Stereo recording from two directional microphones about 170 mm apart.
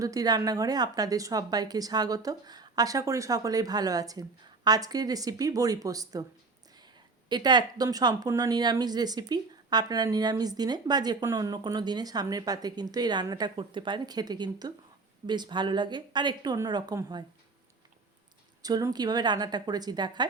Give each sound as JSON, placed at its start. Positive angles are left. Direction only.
{"t": 0.0, "sound": "speech", "side_deg": -20}
{"t": 7.3, "sound": "speech", "side_deg": -25}
{"t": 18.6, "sound": "speech", "side_deg": -20}